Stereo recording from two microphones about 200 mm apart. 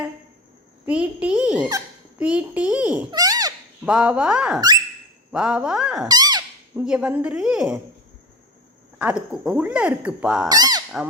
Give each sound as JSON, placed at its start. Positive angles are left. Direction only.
{"t": 0.9, "sound": "a child's voice", "side_deg": -5}
{"t": 3.1, "sound": "a sound", "side_deg": -20}
{"t": 3.8, "sound": "a woman's voice", "side_deg": -5}
{"t": 6.1, "sound": "a sound", "side_deg": -20}
{"t": 6.8, "sound": "a woman's voice", "side_deg": -5}
{"t": 9.0, "sound": "speech", "side_deg": -5}
{"t": 10.5, "sound": "honk", "side_deg": -20}